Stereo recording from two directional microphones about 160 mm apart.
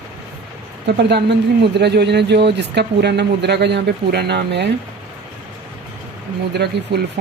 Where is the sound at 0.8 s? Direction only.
90° right.